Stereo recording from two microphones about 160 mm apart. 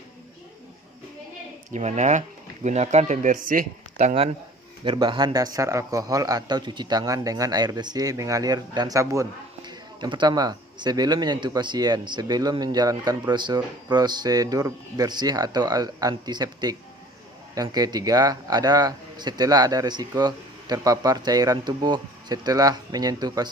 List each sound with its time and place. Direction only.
1.7 s speech: 45° right (ahead or behind)
3.9 s speech: 40° right (ahead or behind)
4.8 s speech: 30° right (ahead or behind)